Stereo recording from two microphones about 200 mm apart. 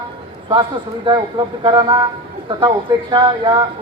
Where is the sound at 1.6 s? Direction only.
20° right (ahead or behind).